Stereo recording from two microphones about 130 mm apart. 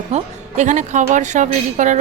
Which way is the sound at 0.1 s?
70° right (ahead or behind).